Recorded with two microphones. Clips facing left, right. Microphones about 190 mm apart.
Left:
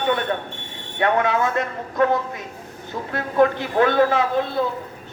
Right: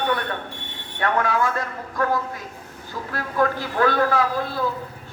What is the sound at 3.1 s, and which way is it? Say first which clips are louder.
Speech: left 5 dB; 25° left (ahead or behind).